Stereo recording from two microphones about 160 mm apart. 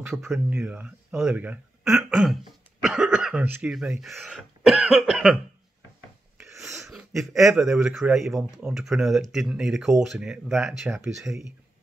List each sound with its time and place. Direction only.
0.2 s speech: 5° right (ahead or behind)
6.3 s a sound: 15° right (ahead or behind)
6.9 s speech: centre (ahead or behind)